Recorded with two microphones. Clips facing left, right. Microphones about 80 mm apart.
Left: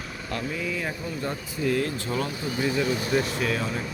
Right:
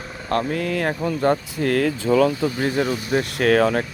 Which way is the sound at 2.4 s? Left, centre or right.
Right.